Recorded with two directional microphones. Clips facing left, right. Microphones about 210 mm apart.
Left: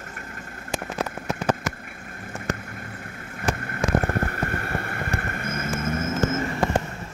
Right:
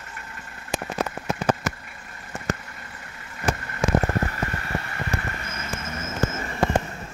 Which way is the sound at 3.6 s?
55° left (ahead or behind).